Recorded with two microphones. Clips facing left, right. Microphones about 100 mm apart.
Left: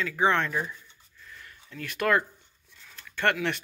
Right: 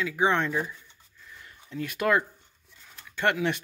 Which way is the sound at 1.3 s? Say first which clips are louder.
Right 2 dB; 20° right (ahead or behind).